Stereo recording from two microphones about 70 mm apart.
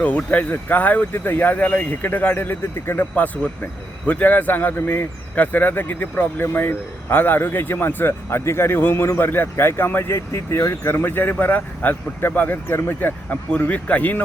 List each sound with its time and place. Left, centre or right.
0.0 s speech: left
10.8 s speech: left